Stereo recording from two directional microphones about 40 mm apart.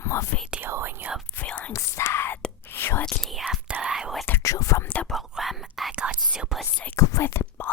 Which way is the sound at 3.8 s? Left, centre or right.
Centre.